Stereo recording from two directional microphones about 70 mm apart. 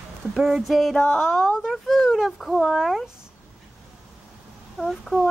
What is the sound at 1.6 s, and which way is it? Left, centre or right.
Speech, centre.